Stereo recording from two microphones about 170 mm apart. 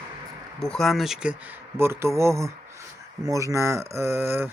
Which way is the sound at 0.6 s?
Centre (ahead or behind).